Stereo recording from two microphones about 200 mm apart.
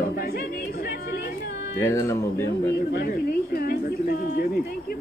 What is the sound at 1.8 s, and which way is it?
Speech, 15° left (ahead or behind).